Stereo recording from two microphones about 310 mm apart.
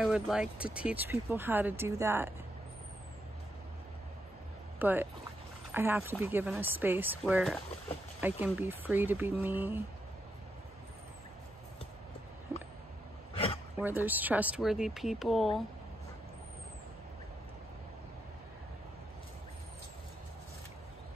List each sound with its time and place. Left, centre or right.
0.0 s speech: centre
4.7 s speech: centre
13.3 s a sound: centre
13.7 s speech: centre